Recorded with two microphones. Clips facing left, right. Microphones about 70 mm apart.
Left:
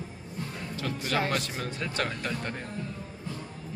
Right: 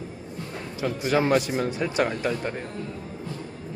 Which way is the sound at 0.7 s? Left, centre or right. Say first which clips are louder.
Right 7 dB; centre.